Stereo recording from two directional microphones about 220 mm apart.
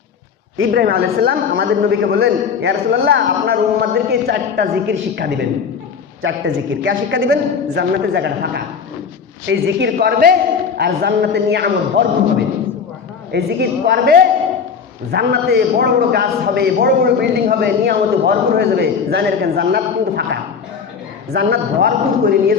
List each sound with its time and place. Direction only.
0.7 s a man's voice: 45° right (ahead or behind)
2.1 s a man's voice: 55° right (ahead or behind)
6.2 s a man's voice: 60° right (ahead or behind)
13.3 s a man's voice: 45° right (ahead or behind)